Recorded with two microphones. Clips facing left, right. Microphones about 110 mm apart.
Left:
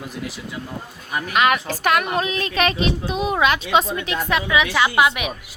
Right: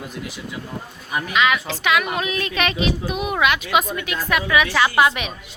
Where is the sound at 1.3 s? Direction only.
50° left (ahead or behind); by 4.4 s 25° left (ahead or behind).